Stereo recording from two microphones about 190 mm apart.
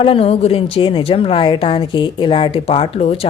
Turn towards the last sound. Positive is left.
turn(degrees=30)  # may be behind; listen again after turning